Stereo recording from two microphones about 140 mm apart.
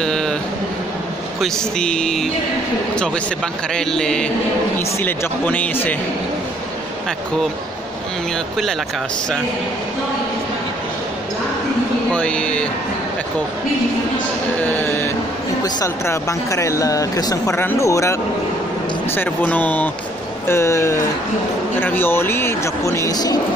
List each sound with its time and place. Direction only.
0.0 s a sound: 5° left (ahead or behind)
1.4 s speech: 5° left (ahead or behind)
3.7 s speech: 5° left (ahead or behind)
4.7 s speech: 15° left (ahead or behind)
12.1 s speech: 10° left (ahead or behind)
14.6 s speech: 15° left (ahead or behind)